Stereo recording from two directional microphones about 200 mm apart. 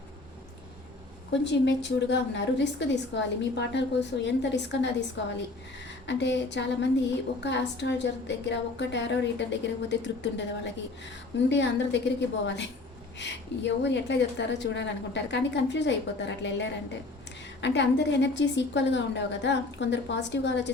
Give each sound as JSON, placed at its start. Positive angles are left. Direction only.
{"t": 1.3, "sound": "a woman's voice", "side_deg": 60}
{"t": 6.1, "sound": "a woman's voice", "side_deg": 60}